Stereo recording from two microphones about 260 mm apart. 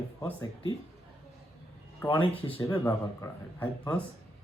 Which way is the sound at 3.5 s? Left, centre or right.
Centre.